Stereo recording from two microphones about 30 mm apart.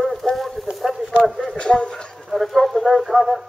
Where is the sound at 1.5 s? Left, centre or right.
Left.